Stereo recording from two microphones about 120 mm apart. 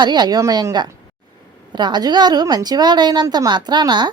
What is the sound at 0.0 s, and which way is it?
A woman's voice, 35° right (ahead or behind).